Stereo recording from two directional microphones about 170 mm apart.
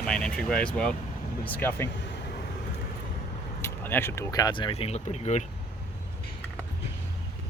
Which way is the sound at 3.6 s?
15° left (ahead or behind).